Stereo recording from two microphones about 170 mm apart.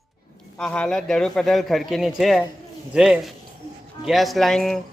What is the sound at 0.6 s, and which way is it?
A child's voice, 5° left (ahead or behind).